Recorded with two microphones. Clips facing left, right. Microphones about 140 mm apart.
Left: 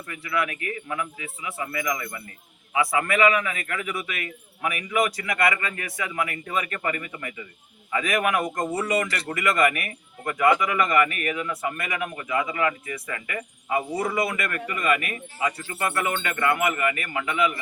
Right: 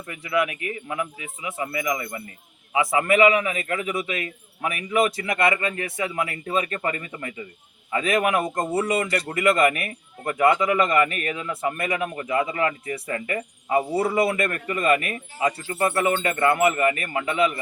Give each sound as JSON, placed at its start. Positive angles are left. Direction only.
{"t": 0.1, "sound": "a man's voice", "side_deg": -20}